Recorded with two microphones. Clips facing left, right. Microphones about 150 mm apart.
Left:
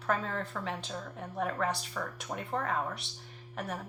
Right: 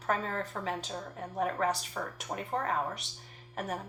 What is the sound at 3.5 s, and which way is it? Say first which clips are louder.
Speech: right 2 dB; 45° right (ahead or behind).